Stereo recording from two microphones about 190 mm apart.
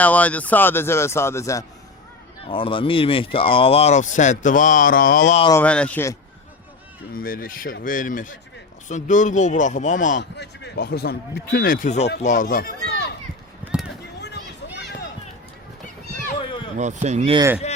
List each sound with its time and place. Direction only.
0.0 s speech: 10° left (ahead or behind)
2.4 s speech: 25° left (ahead or behind); by 5.4 s 45° left (ahead or behind)
5.5 s speech: 5° left (ahead or behind)
7.1 s speech: 50° left (ahead or behind)
10.3 s a child's voice: 60° left (ahead or behind)
16.4 s a sound: 25° left (ahead or behind)
16.7 s speech: 40° right (ahead or behind)